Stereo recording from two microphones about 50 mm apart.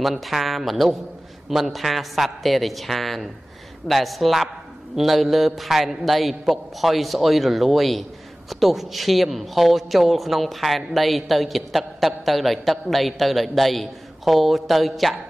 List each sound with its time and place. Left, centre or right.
0.0 s a man's voice: centre